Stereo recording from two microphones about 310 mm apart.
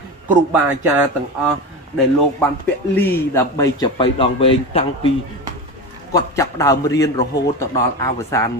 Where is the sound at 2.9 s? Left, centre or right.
Centre.